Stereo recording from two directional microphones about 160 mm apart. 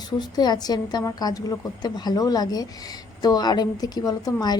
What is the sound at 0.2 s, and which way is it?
A woman's voice, 25° left (ahead or behind).